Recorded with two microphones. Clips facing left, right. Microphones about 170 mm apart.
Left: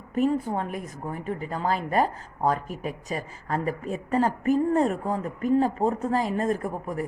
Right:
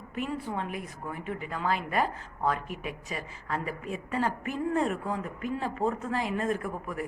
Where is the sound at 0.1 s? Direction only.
40° left (ahead or behind).